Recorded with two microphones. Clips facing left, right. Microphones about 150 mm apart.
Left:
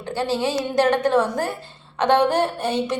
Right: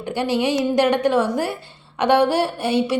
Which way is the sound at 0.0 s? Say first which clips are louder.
Right 2 dB; 15° right (ahead or behind).